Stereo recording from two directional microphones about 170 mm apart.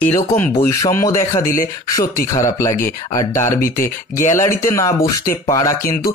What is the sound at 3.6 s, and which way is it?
Speech, 55° left (ahead or behind).